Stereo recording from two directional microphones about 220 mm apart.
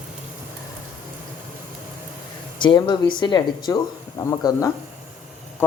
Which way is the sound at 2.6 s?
20° left (ahead or behind).